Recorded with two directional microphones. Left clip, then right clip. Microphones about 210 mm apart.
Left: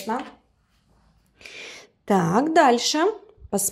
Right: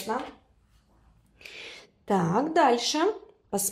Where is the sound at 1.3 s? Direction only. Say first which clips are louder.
Left 3 dB; 30° left (ahead or behind).